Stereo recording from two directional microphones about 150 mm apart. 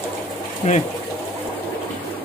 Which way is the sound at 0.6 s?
45° left (ahead or behind).